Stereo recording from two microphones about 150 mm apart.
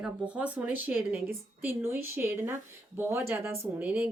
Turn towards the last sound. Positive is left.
turn(degrees=-10)  # may be behind; listen again after turning